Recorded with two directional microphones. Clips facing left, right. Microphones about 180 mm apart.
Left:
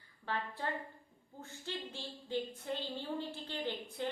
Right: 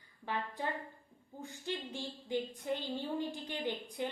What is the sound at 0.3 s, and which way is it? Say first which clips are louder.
A woman's voice: right 1 dB; 15° right (ahead or behind).